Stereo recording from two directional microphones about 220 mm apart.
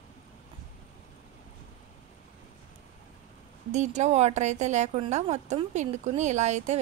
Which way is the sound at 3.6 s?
30° right (ahead or behind).